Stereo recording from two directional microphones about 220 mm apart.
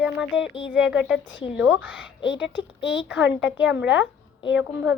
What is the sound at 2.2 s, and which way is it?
Speech, 55° left (ahead or behind).